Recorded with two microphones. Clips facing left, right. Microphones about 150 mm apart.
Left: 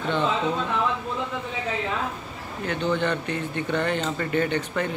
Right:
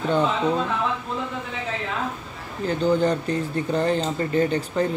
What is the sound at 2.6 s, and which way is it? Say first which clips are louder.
Speech: right 5 dB; 35° right (ahead or behind).